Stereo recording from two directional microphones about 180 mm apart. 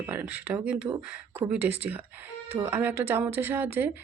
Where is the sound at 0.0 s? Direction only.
10° right (ahead or behind).